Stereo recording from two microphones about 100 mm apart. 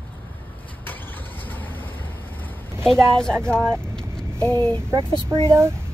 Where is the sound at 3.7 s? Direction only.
5° left (ahead or behind).